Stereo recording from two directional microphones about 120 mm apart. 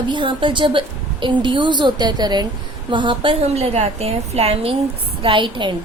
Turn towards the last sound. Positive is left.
turn(degrees=-40)  # may be behind; listen again after turning